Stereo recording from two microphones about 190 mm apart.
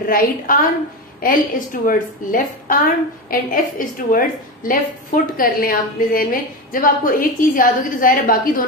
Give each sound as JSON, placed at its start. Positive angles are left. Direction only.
{"t": 0.0, "sound": "a woman's voice", "side_deg": 50}